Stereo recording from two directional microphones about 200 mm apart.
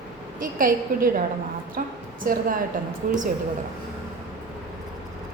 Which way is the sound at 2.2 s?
45° right (ahead or behind).